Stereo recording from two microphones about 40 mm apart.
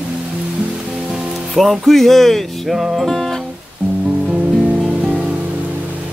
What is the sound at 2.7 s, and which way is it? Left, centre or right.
Music, centre.